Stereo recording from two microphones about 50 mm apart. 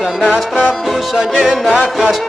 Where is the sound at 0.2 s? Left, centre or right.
Centre.